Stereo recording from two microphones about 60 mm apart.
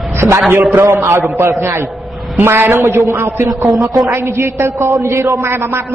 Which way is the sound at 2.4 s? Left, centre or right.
Right.